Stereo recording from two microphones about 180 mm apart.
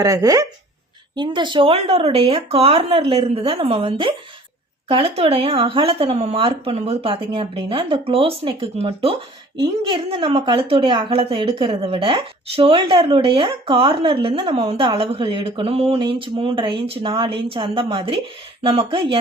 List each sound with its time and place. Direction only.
0.0 s a woman's voice: 20° right (ahead or behind)